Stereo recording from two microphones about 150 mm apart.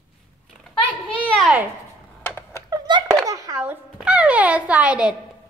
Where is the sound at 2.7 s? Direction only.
25° right (ahead or behind).